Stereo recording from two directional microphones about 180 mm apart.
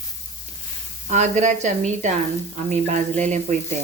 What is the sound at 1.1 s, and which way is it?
A woman's voice, 40° right (ahead or behind).